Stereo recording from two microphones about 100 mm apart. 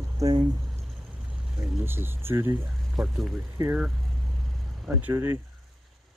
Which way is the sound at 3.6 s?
30° right (ahead or behind).